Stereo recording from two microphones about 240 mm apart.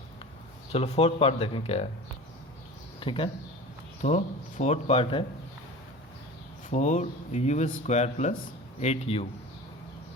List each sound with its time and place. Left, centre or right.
0.7 s speech: left
3.0 s speech: left
6.7 s speech: left